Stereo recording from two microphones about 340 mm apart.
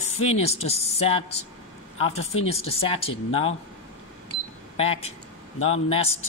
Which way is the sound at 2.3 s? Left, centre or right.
Left.